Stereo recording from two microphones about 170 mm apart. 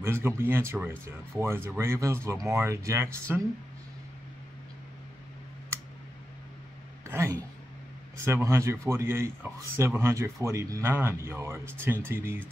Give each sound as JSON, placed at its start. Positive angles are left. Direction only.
{"t": 0.0, "sound": "speech", "side_deg": -15}
{"t": 7.1, "sound": "a sound", "side_deg": -15}
{"t": 8.2, "sound": "speech", "side_deg": -15}